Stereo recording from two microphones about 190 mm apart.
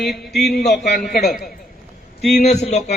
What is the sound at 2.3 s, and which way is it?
Speech, 35° left (ahead or behind).